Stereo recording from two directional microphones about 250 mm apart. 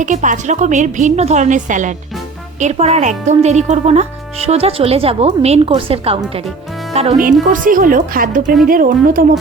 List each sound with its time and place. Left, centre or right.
0.0 s speech: right